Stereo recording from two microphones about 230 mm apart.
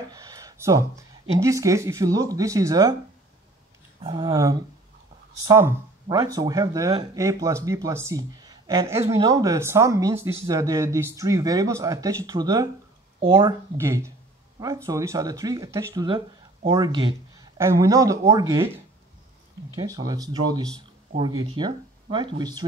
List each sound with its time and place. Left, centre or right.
0.1 s a sound: centre
1.4 s speech: centre
4.0 s speech: centre
19.8 s speech: centre